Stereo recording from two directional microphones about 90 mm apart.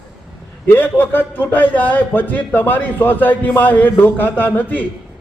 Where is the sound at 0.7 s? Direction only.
25° left (ahead or behind).